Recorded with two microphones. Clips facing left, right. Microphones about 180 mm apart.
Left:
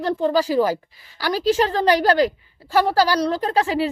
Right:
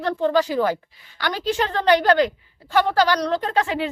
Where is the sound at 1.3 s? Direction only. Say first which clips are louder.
Left 5 dB; 35° left (ahead or behind).